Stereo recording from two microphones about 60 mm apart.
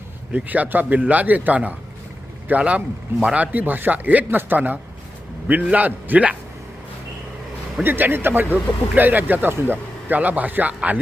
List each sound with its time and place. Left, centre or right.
0.3 s a man's voice: right
7.8 s a man's voice: right